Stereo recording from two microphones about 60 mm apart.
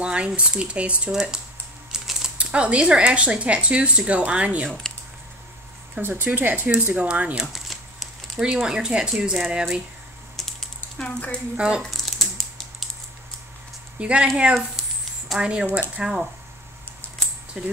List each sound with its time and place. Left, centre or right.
0.0 s a sound: centre
0.3 s speech: centre
1.9 s typing: centre
2.3 s speech: centre
4.9 s a sound: centre
5.9 s speech: right
7.3 s a sound: centre
8.5 s speech: centre
10.3 s typing: centre
10.8 s speech: left
11.5 s speech: centre
11.8 s typing: centre
13.9 s speech: centre
17.6 s speech: centre